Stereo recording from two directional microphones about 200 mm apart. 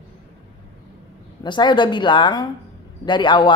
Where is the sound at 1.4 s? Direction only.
20° left (ahead or behind).